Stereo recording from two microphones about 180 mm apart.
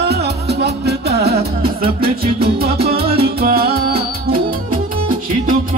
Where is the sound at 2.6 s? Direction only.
60° right (ahead or behind).